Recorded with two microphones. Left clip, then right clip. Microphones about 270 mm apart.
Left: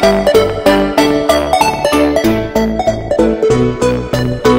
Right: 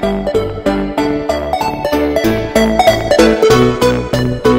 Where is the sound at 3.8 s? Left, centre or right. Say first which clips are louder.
Right 1 dB; centre.